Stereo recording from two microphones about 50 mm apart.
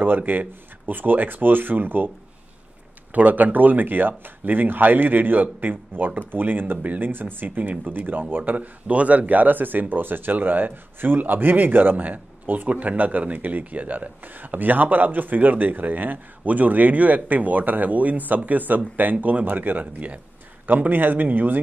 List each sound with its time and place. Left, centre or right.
0.0 s a man's voice: right
3.1 s a man's voice: right